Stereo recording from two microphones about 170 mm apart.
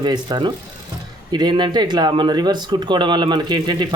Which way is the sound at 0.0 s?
25° right (ahead or behind).